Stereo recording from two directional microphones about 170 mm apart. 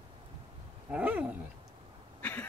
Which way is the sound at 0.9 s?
10° right (ahead or behind).